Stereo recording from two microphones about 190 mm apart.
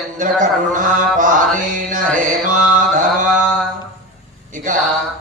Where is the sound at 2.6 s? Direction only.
45° right (ahead or behind).